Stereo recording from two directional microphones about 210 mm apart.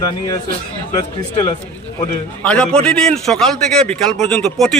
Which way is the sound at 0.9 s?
20° left (ahead or behind).